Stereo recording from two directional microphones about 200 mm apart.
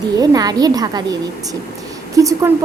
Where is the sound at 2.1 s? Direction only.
15° right (ahead or behind).